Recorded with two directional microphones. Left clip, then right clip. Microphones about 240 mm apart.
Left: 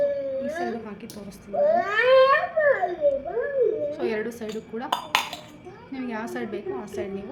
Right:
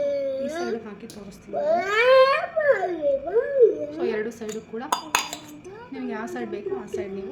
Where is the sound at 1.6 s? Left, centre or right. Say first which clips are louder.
Right 1 dB; right.